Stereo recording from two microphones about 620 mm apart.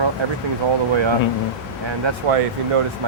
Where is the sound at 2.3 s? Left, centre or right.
Right.